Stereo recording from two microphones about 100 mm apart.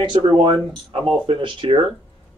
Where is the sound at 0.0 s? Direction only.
50° right (ahead or behind).